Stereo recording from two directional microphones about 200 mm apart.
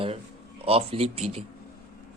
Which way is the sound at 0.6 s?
30° right (ahead or behind).